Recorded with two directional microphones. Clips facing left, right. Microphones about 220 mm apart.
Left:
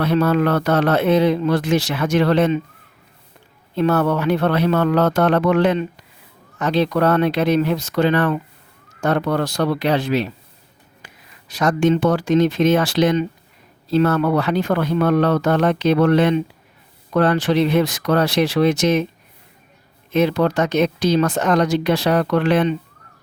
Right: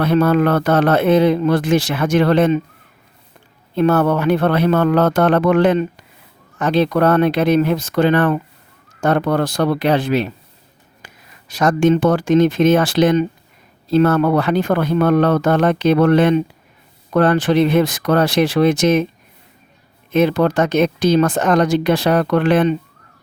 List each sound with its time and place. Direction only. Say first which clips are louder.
0.0 s speech: right 3 dB; 50° right (ahead or behind)
3.8 s speech: right 3 dB; 50° right (ahead or behind)
20.1 s speech: right 2 dB; 50° right (ahead or behind)